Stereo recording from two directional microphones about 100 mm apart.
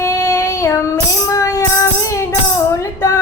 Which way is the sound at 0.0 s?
30° left (ahead or behind).